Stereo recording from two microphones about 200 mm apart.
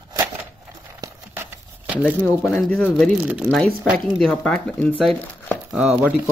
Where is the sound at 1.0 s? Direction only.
10° right (ahead or behind).